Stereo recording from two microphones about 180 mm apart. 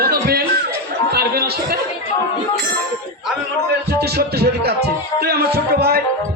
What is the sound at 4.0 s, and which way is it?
Music, 60° right (ahead or behind).